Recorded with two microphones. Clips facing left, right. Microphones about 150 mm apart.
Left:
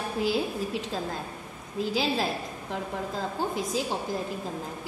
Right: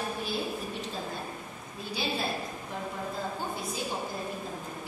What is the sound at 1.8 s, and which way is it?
Speech, 90° left.